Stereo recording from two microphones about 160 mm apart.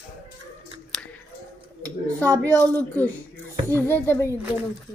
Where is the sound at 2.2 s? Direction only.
20° right (ahead or behind).